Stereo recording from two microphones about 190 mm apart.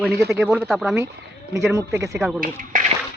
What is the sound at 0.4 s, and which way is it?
Speech, centre (ahead or behind).